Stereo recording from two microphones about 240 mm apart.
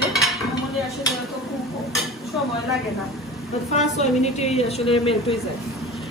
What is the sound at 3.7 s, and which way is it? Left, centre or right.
A woman's voice, left.